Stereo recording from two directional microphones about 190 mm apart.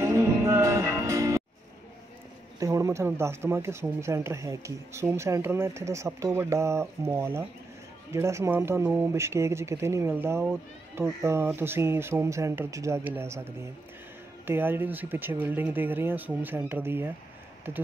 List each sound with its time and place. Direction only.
0.0 s music: 15° right (ahead or behind)
2.6 s speech: 15° right (ahead or behind)